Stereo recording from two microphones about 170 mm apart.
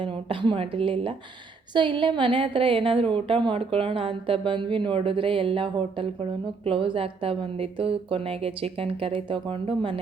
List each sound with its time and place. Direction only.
0.0 s a woman's voice: 30° right (ahead or behind)